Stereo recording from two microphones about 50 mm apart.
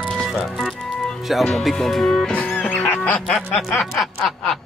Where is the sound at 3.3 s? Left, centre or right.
Centre.